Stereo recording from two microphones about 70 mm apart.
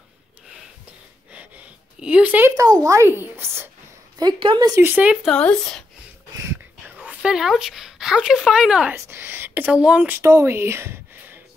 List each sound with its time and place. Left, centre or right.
1.3 s a sound: centre
2.5 s speech: right
3.1 s a woman's voice: right
4.2 s speech: right
4.8 s speech: right
5.3 s speech: centre
7.2 s speech: centre
9.1 s a sound: right
10.2 s a woman's voice: right